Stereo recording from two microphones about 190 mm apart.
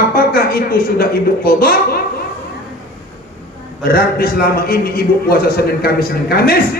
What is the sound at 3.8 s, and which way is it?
A man's voice, 50° left (ahead or behind).